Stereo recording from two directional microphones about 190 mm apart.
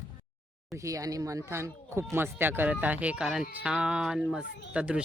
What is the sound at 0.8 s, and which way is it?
Speech, 15° right (ahead or behind).